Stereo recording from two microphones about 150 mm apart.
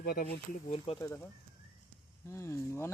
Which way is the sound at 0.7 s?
40° left (ahead or behind).